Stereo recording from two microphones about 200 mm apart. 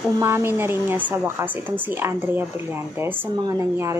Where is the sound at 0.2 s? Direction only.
10° right (ahead or behind).